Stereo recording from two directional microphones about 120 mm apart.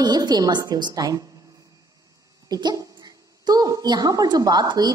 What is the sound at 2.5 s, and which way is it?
A woman's voice, 30° right (ahead or behind).